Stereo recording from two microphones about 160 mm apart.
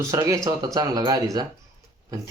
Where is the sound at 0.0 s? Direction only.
20° right (ahead or behind).